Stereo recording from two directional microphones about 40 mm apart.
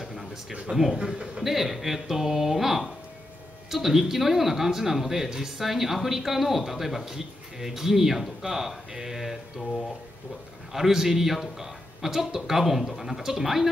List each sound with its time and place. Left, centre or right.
0.0 s a sound: centre
0.5 s speech: centre
1.0 s a man's voice: right
1.4 s speech: centre
10.7 s speech: centre